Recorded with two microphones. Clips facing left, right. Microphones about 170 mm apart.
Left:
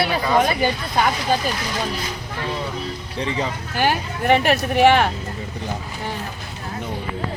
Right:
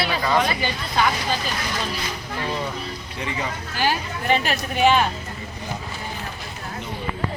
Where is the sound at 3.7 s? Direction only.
55° left (ahead or behind).